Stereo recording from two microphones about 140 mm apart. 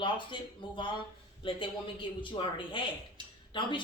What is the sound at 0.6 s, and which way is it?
A woman's voice, 35° left (ahead or behind).